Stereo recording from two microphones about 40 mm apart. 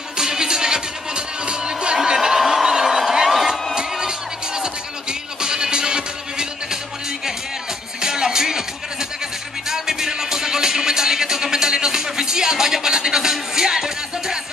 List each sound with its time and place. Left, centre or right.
0.2 s music: centre
2.1 s a sound: centre
5.4 s music: centre
8.0 s music: centre
9.7 s music: centre